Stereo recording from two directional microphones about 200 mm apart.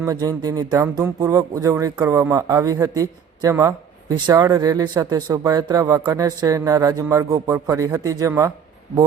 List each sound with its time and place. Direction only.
0.0 s speech: 15° right (ahead or behind)